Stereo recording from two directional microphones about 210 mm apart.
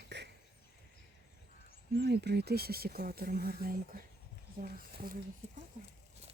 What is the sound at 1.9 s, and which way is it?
Speech, 50° right (ahead or behind).